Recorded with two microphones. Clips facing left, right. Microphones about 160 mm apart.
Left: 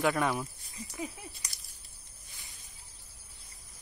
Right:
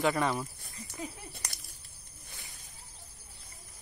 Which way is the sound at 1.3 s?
55° right (ahead or behind).